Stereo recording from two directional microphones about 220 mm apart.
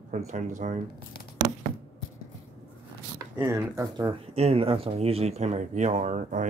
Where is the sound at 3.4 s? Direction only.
10° right (ahead or behind); by 6.4 s 35° right (ahead or behind).